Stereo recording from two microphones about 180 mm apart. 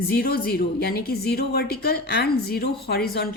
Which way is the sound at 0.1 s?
55° left (ahead or behind).